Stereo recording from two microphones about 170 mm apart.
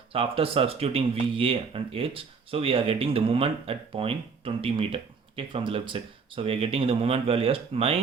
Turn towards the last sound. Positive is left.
turn(degrees=-35)  # may be behind; listen again after turning